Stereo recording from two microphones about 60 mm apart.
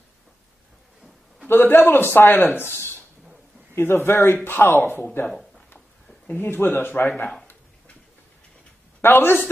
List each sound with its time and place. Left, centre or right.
1.5 s speech: left
3.7 s speech: left
9.0 s speech: left